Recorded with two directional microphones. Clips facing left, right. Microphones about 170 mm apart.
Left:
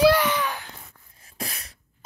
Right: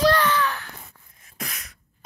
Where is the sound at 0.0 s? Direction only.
10° left (ahead or behind).